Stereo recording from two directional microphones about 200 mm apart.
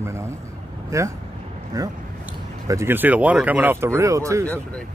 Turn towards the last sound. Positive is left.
turn(degrees=10)  # may be behind; listen again after turning